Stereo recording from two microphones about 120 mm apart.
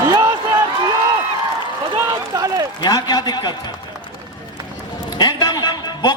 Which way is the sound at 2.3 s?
35° right (ahead or behind).